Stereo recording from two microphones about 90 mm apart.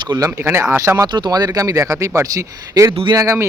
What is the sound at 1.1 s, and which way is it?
Speech, 45° right (ahead or behind).